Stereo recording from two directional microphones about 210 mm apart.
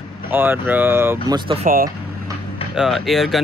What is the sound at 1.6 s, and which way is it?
Speech, 45° right (ahead or behind).